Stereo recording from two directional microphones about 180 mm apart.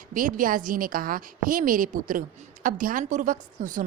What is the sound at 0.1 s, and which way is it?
A woman's voice, 50° right (ahead or behind).